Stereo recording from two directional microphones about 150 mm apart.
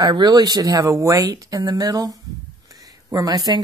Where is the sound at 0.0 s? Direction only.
30° right (ahead or behind).